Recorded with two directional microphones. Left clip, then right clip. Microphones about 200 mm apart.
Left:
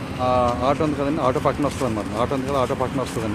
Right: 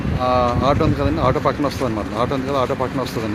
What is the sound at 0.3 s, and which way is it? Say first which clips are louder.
Speech: right 2 dB; 5° right (ahead or behind).